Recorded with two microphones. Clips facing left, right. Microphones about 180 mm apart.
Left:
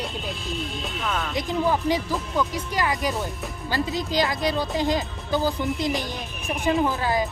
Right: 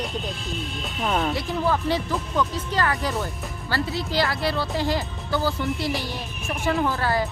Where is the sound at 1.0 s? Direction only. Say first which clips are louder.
Right 6 dB; 30° right (ahead or behind).